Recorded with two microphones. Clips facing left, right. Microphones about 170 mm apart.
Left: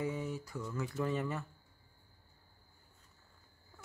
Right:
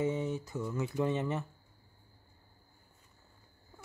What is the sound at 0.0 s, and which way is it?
Speech, 25° right (ahead or behind).